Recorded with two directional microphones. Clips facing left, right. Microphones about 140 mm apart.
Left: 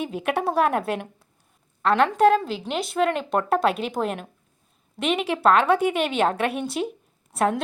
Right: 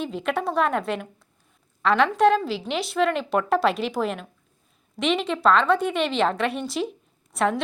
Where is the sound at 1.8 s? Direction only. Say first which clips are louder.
Left 1 dB; 5° left (ahead or behind).